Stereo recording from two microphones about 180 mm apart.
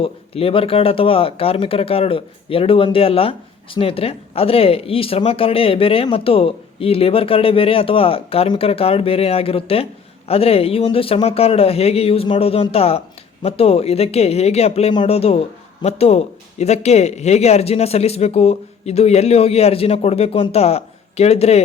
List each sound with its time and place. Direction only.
0.0 s speech: 30° left (ahead or behind)